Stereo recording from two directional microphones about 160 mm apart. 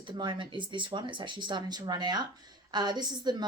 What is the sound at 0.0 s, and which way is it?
Speech, 30° right (ahead or behind).